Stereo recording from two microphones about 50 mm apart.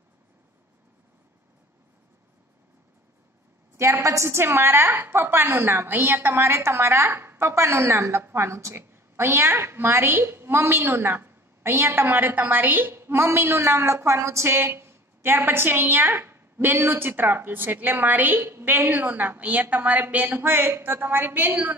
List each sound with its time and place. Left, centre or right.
3.7 s a woman's voice: right
8.2 s a woman's voice: right
12.9 s a woman's voice: right